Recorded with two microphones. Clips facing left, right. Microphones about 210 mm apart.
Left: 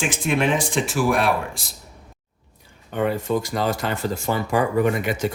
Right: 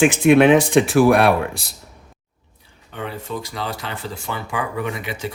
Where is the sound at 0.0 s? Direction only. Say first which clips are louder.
Right 9 dB; 60° right (ahead or behind).